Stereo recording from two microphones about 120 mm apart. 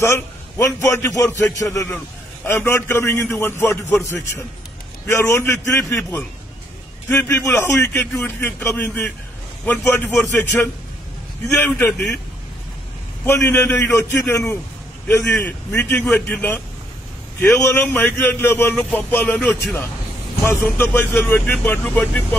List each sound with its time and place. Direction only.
0.0 s a man's voice: 25° left (ahead or behind)
13.2 s a man's voice: 20° left (ahead or behind)